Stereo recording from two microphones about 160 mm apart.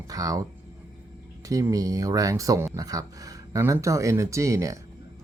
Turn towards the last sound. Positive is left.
turn(degrees=-20)  # may be behind; listen again after turning